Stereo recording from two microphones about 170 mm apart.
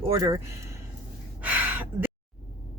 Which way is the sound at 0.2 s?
20° right (ahead or behind).